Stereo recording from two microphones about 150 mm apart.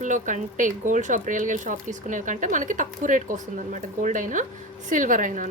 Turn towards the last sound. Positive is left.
turn(degrees=-60)  # may be behind; listen again after turning